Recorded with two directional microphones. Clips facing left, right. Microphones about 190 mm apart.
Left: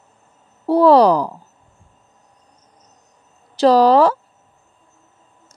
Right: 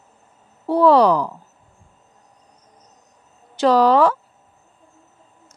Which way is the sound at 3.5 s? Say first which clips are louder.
Left 3 dB; 35° left (ahead or behind).